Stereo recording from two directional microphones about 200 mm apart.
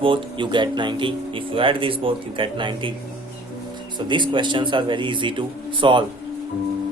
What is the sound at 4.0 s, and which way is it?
Speech, 25° right (ahead or behind).